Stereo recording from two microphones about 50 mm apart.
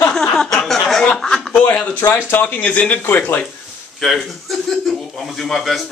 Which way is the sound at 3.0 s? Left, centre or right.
Left.